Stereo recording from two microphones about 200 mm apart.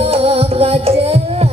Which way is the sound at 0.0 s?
30° right (ahead or behind).